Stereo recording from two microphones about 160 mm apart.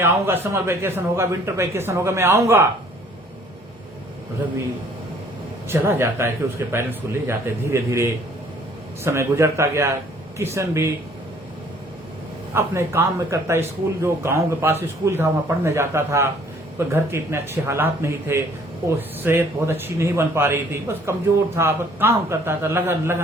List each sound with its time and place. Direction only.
0.0 s a man's voice: 15° right (ahead or behind)
5.6 s a man's voice: 15° right (ahead or behind)
12.5 s a man's voice: 15° right (ahead or behind)